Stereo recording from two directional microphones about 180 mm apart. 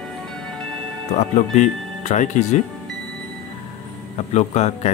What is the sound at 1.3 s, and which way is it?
Speech, 40° left (ahead or behind).